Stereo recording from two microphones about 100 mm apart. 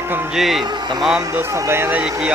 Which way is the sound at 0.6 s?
45° right (ahead or behind).